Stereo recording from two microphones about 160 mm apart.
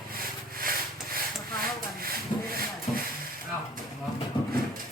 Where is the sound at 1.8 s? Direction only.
70° right (ahead or behind).